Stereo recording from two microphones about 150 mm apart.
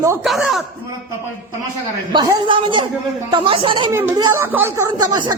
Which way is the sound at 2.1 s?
30° right (ahead or behind).